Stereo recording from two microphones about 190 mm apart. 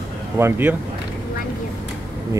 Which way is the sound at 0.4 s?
10° right (ahead or behind).